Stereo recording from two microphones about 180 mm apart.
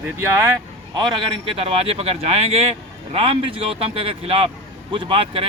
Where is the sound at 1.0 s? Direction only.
30° right (ahead or behind).